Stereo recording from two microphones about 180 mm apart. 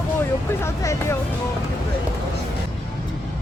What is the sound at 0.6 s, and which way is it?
Speech, 15° left (ahead or behind).